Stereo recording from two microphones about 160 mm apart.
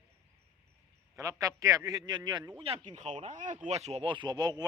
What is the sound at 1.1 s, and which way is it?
A man's voice, 20° right (ahead or behind).